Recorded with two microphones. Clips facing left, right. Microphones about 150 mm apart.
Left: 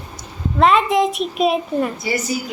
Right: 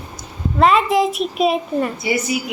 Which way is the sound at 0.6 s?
Centre (ahead or behind).